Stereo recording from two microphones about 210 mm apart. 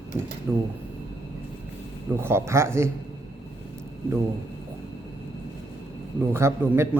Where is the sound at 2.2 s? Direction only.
10° right (ahead or behind).